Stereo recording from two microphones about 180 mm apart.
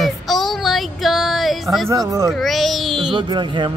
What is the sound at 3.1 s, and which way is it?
Speech, 25° right (ahead or behind).